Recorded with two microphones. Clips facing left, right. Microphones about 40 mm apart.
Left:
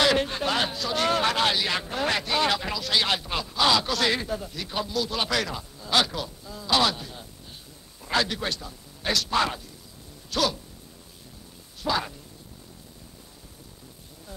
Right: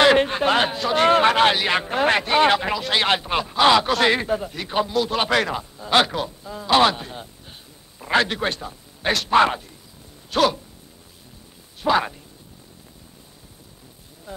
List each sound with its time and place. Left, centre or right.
0.0 s a man's voice: right
11.8 s speech: right